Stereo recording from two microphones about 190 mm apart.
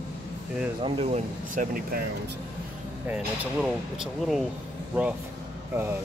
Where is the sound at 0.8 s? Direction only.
35° right (ahead or behind).